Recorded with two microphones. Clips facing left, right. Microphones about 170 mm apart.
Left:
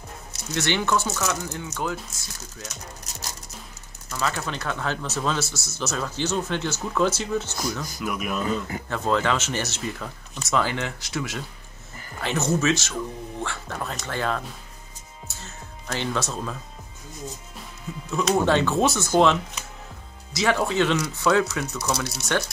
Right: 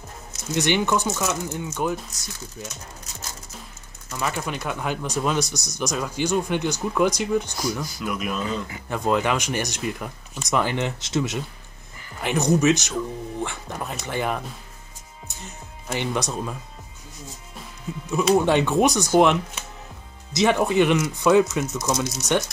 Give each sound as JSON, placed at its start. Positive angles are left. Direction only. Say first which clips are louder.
{"t": 0.5, "sound": "speech", "louder": "right 2 dB", "side_deg": -15}
{"t": 4.1, "sound": "speech", "louder": "right 1 dB", "side_deg": -15}
{"t": 8.0, "sound": "speech", "louder": "left 1 dB", "side_deg": 5}
{"t": 8.8, "sound": "speech", "louder": "right 2 dB", "side_deg": -15}
{"t": 18.1, "sound": "speech", "louder": "right 2 dB", "side_deg": -10}
{"t": 20.3, "sound": "speech", "louder": "right 3 dB", "side_deg": -20}
{"t": 22.0, "sound": "speech", "louder": "right 3 dB", "side_deg": 0}